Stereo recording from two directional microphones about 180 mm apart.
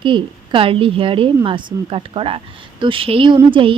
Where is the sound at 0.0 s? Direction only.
30° right (ahead or behind).